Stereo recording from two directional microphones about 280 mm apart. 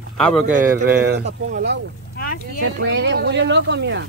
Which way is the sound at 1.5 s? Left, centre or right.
Right.